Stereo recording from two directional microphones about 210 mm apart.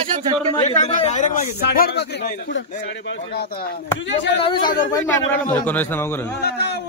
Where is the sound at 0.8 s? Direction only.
35° left (ahead or behind).